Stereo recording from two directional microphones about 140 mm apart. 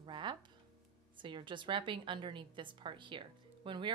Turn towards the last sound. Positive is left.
turn(degrees=-35)  # may be behind; listen again after turning